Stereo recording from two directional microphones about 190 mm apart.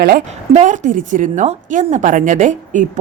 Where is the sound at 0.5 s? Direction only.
40° right (ahead or behind).